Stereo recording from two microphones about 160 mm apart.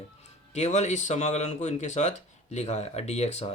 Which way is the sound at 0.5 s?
45° left (ahead or behind).